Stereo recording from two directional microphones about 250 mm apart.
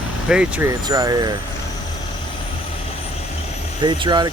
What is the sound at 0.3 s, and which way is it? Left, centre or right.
Speech, centre.